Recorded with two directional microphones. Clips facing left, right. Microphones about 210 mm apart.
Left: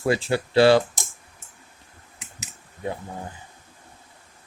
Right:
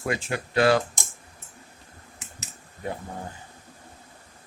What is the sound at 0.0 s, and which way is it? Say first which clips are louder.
Speech: left 6 dB; 30° left (ahead or behind).